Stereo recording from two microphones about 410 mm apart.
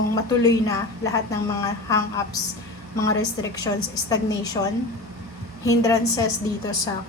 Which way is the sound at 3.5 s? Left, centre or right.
Centre.